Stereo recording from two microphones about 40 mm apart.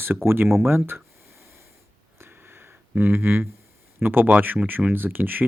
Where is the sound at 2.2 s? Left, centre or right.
Right.